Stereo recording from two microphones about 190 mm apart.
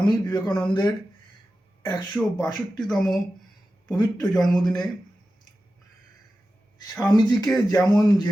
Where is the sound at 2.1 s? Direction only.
5° left (ahead or behind).